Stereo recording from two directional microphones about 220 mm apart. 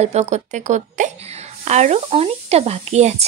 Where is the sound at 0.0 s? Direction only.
30° right (ahead or behind).